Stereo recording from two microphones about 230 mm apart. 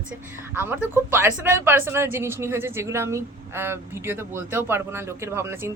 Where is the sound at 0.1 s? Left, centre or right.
Centre.